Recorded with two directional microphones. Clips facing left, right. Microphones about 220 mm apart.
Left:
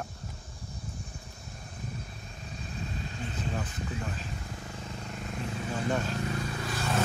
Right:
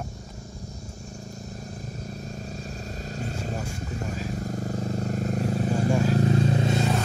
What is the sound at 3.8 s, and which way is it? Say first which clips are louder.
Speech: right 4 dB; 45° right (ahead or behind).